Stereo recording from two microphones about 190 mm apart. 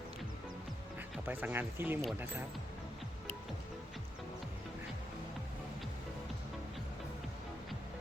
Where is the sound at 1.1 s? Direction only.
10° right (ahead or behind).